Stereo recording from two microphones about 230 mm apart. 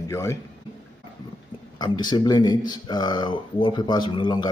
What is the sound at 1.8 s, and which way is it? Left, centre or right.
Speech, centre.